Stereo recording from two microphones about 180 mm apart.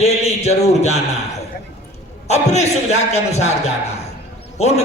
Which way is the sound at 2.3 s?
40° left (ahead or behind).